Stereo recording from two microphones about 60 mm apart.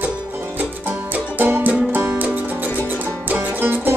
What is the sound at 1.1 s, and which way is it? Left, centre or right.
Music, right.